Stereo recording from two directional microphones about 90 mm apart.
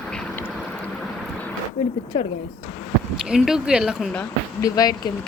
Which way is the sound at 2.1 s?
65° left (ahead or behind).